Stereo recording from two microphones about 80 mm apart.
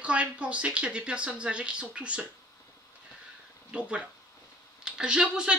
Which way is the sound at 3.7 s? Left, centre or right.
Centre.